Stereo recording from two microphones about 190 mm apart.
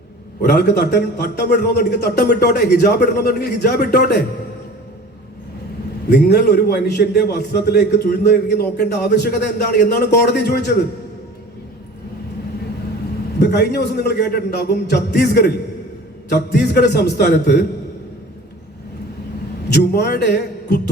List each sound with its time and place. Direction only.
0.4 s a man's voice: 60° left (ahead or behind)
6.1 s a man's voice: 60° left (ahead or behind)
13.4 s a man's voice: 60° left (ahead or behind)
19.7 s a man's voice: 60° left (ahead or behind)